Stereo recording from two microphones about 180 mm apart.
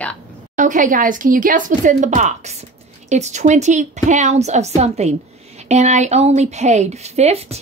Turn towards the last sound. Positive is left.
turn(degrees=-35)  # may be behind; listen again after turning